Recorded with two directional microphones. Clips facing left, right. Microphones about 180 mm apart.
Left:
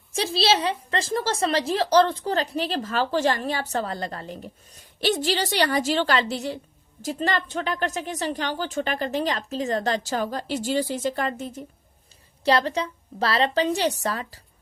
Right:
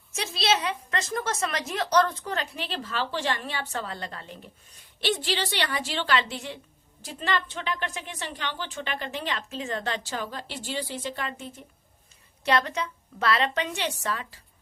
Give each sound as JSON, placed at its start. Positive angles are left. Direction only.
{"t": 0.1, "sound": "a woman's voice", "side_deg": 30}